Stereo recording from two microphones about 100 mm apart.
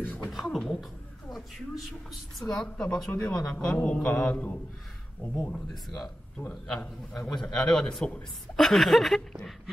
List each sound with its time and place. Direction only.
0.0 s speech: 20° left (ahead or behind)
0.3 s a man's voice: centre (ahead or behind)
2.3 s a woman's voice: 5° left (ahead or behind)
6.8 s a man's voice: 5° left (ahead or behind)